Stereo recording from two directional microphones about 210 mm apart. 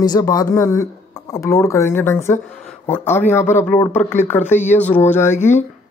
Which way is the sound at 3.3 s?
10° left (ahead or behind).